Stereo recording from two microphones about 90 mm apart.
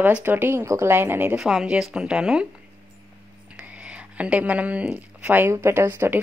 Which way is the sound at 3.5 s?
15° right (ahead or behind).